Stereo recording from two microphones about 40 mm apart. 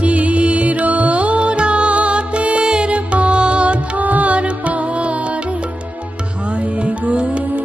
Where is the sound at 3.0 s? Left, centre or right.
Right.